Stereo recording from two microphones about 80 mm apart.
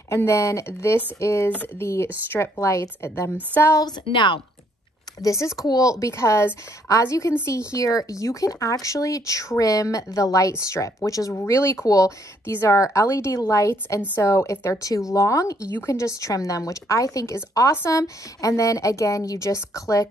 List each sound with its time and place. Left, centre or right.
0.3 s a woman's voice: left
3.7 s a woman's voice: left
5.2 s a woman's voice: left